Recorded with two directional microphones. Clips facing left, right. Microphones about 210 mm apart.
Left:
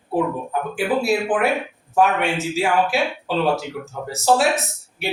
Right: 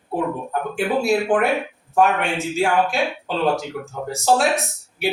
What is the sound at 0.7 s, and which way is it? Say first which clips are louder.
Speech: right 1 dB; centre (ahead or behind).